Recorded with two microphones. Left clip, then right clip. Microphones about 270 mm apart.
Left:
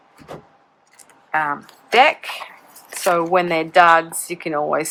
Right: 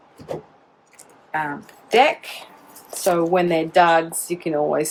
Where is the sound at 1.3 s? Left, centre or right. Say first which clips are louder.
Left 5 dB; left.